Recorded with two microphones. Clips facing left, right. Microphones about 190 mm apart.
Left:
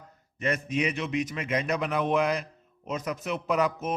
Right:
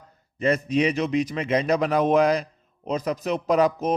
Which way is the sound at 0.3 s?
30° right (ahead or behind).